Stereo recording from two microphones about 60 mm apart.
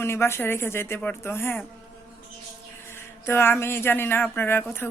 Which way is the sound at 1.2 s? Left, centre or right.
Left.